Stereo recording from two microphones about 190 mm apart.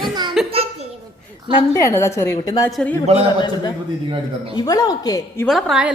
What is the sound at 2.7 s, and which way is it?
Speech, centre (ahead or behind).